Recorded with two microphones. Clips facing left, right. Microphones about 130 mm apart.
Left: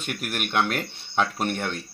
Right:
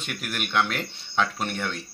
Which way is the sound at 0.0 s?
45° left (ahead or behind).